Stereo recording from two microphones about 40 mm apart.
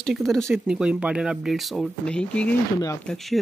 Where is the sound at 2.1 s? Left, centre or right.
Left.